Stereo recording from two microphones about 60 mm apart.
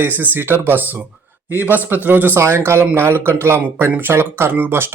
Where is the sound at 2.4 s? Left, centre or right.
Right.